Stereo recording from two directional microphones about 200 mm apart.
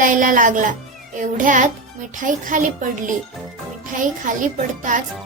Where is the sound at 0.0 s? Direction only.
40° right (ahead or behind).